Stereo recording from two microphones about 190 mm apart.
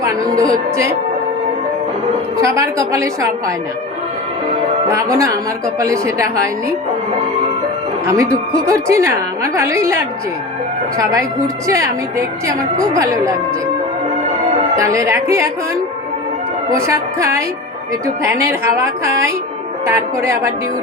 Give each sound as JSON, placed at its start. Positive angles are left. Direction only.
{"t": 0.0, "sound": "a woman's voice", "side_deg": -15}
{"t": 2.4, "sound": "a woman's voice", "side_deg": -15}
{"t": 4.9, "sound": "a woman's voice", "side_deg": -15}
{"t": 8.0, "sound": "a woman's voice", "side_deg": -15}
{"t": 14.8, "sound": "a woman's voice", "side_deg": -15}